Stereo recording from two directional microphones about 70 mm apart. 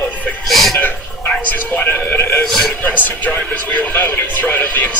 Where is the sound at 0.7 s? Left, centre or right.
Left.